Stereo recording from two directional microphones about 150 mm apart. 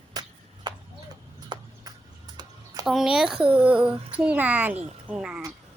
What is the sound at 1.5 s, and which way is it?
Clip-clop, 30° right (ahead or behind).